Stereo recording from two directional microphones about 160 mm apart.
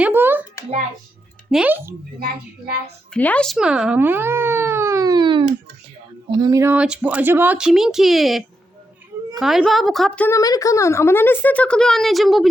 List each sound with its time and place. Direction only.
0.0 s a sound: 10° right (ahead or behind)
1.5 s speech: 5° right (ahead or behind)
2.1 s a woman's voice: 70° right (ahead or behind)
3.1 s a woman's voice: 10° left (ahead or behind)
10.2 s speech: 20° left (ahead or behind); by 12.5 s centre (ahead or behind)